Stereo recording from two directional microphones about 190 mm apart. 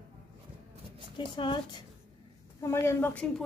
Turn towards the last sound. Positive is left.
turn(degrees=10)  # may be behind; listen again after turning